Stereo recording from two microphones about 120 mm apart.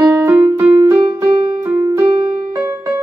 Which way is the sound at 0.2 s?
20° right (ahead or behind).